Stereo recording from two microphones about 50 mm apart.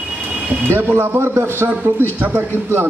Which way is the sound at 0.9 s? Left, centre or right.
Right.